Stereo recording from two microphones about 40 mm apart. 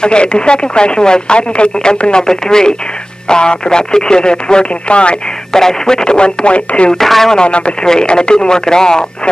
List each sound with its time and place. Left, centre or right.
0.0 s speech: left
5.5 s speech: centre; by 6.9 s left
6.9 s speech: centre
7.3 s speech: left
7.8 s speech: centre